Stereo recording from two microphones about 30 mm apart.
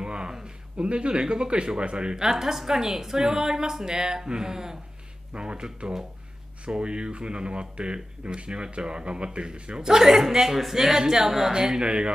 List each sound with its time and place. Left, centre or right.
0.0 s a sound: right
0.7 s speech: right
2.1 s speech: centre
5.3 s speech: right; by 11.5 s centre
11.5 s speech: right